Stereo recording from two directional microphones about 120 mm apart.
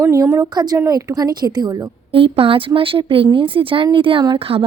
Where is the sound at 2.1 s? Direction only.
50° right (ahead or behind).